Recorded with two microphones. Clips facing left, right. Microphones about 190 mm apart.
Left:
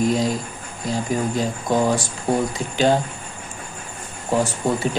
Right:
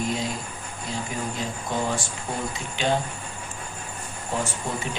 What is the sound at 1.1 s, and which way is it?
Speech, 40° left (ahead or behind).